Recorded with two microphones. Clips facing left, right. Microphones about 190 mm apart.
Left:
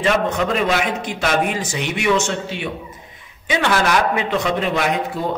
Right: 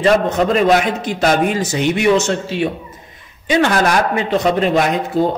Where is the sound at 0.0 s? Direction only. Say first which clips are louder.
Right 5 dB; 40° right (ahead or behind).